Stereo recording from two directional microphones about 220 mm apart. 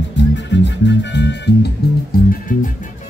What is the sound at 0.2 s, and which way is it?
Music, 55° left (ahead or behind).